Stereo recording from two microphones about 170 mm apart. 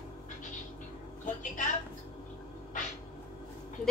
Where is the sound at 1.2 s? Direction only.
50° left (ahead or behind).